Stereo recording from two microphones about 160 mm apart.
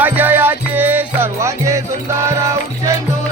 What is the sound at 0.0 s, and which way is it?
Music, 10° right (ahead or behind).